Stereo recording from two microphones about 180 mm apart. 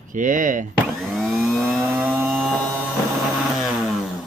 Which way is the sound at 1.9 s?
10° right (ahead or behind).